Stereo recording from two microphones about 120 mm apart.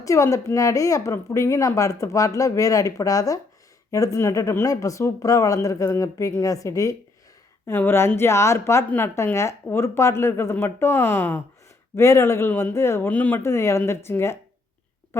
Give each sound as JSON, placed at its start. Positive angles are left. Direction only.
{"t": 0.0, "sound": "a woman's voice", "side_deg": 25}